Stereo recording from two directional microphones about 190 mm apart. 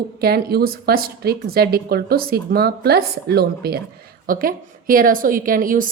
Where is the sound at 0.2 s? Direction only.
55° right (ahead or behind).